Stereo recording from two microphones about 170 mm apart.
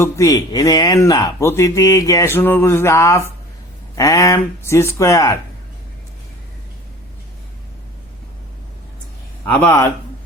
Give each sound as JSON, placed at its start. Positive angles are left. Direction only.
{"t": 0.0, "sound": "speech", "side_deg": 20}
{"t": 9.5, "sound": "speech", "side_deg": 10}